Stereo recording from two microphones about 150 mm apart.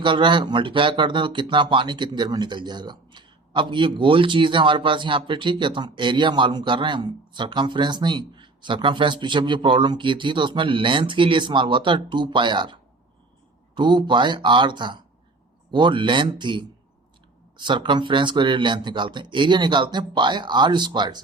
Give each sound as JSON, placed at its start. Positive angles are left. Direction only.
{"t": 0.0, "sound": "speech", "side_deg": -30}
{"t": 13.7, "sound": "speech", "side_deg": -30}